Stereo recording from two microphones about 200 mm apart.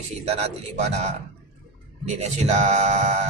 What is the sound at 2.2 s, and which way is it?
Speech, 35° right (ahead or behind).